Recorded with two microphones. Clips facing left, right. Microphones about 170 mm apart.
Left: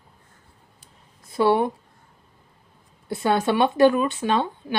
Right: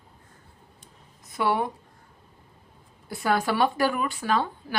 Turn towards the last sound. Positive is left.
turn(degrees=20)  # may be behind; listen again after turning